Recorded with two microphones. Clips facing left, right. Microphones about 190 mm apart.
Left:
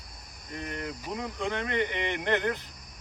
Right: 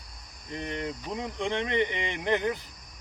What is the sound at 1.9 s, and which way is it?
Speech, 55° left (ahead or behind).